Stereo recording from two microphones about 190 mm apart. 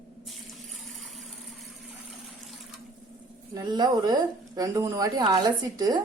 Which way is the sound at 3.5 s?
20° right (ahead or behind).